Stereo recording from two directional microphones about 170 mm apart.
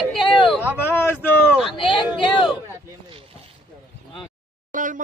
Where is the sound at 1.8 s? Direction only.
30° left (ahead or behind).